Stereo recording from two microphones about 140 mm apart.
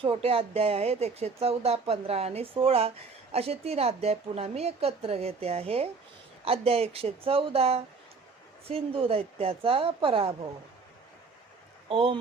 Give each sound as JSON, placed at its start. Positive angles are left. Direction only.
{"t": 0.0, "sound": "a woman's voice", "side_deg": -45}
{"t": 11.9, "sound": "a woman's voice", "side_deg": -40}